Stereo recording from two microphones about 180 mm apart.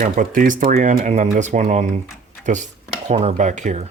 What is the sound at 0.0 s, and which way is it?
Speech, 45° right (ahead or behind).